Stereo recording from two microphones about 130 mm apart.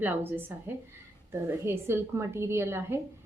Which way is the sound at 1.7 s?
20° right (ahead or behind).